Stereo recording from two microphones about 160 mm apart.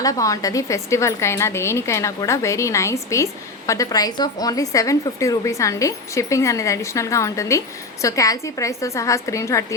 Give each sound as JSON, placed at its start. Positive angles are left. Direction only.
{"t": 0.0, "sound": "a woman's voice", "side_deg": 20}